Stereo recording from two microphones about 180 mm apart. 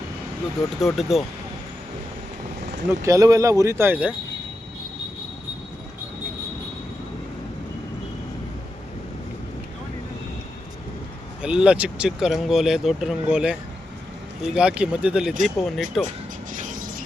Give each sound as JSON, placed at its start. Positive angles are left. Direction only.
{"t": 0.7, "sound": "speech", "side_deg": 0}
{"t": 3.0, "sound": "speech", "side_deg": -20}
{"t": 11.4, "sound": "speech", "side_deg": -5}
{"t": 16.0, "sound": "music", "side_deg": -45}